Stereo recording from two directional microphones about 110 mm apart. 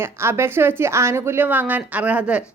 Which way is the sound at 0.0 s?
20° right (ahead or behind).